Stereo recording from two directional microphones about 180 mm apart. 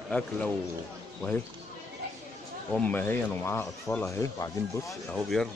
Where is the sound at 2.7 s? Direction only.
10° left (ahead or behind).